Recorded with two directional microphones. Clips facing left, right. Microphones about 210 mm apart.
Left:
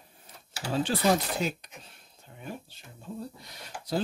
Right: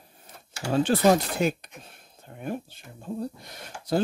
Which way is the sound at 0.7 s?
50° right (ahead or behind).